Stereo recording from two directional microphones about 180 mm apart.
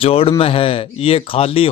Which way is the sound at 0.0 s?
30° left (ahead or behind).